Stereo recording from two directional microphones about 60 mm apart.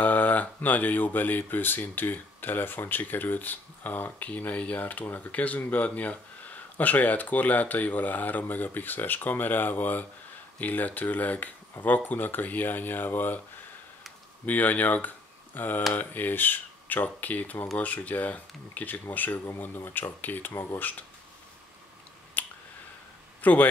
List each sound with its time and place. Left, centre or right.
0.0 s speech: left
14.4 s speech: left
22.4 s finger snapping: left
23.4 s speech: left